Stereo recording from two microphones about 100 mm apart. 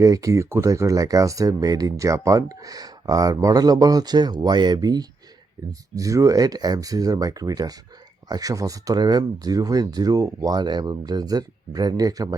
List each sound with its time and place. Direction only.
0.0 s speech: 35° right (ahead or behind)